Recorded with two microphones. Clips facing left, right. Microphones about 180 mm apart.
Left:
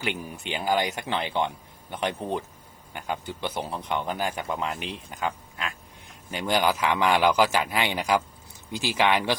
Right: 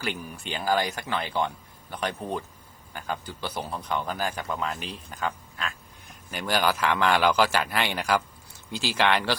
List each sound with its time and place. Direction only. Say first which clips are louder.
0.0 s a man's voice: left 1 dB; 20° left (ahead or behind)